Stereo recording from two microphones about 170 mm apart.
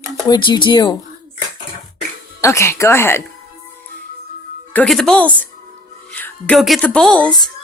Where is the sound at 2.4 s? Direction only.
15° left (ahead or behind).